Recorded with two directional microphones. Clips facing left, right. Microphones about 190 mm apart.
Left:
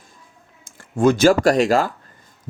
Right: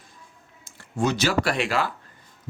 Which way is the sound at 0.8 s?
50° left (ahead or behind).